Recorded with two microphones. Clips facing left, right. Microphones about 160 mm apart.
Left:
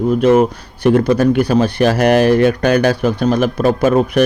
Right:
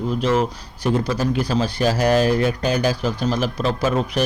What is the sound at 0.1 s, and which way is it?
A man's voice, 55° left (ahead or behind).